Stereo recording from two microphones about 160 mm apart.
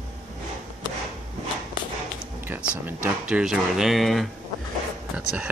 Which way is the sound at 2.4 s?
10° right (ahead or behind).